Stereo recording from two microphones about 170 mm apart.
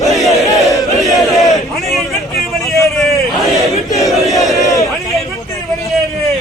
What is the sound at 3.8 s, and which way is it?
Battle cry, 20° left (ahead or behind).